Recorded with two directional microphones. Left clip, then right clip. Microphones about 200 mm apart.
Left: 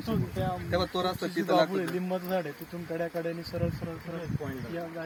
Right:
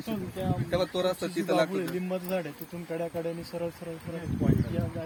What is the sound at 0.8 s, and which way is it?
Speech, 25° right (ahead or behind).